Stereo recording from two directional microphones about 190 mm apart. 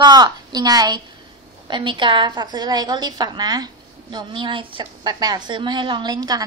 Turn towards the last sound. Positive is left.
turn(degrees=-20)  # may be behind; listen again after turning